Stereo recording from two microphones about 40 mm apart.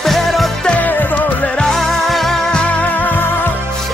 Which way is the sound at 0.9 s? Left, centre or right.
Left.